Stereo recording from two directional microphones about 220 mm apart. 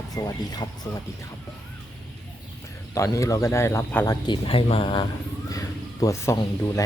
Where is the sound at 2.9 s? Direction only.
15° left (ahead or behind).